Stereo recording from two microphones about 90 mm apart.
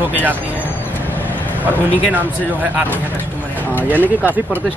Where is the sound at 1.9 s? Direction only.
20° right (ahead or behind).